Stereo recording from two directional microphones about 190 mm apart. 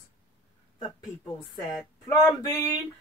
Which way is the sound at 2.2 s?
20° left (ahead or behind).